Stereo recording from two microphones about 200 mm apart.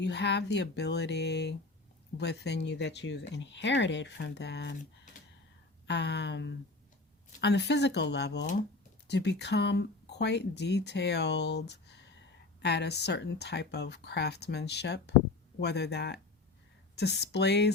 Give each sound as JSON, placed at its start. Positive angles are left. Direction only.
{"t": 0.0, "sound": "speech", "side_deg": 60}
{"t": 5.9, "sound": "speech", "side_deg": 60}